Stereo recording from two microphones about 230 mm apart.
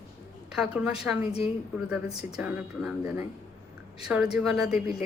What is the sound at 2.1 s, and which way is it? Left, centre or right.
Speech, left.